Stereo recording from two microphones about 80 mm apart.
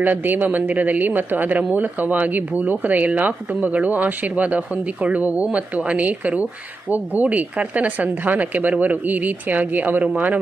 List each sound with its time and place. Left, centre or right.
0.0 s speech: right